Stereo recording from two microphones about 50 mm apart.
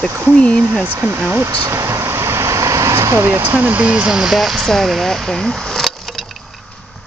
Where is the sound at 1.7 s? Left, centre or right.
Right.